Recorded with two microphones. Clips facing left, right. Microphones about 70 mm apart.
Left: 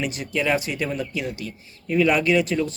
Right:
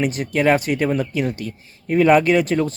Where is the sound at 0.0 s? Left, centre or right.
Right.